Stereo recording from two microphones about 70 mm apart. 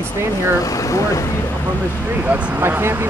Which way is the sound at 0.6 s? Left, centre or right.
Left.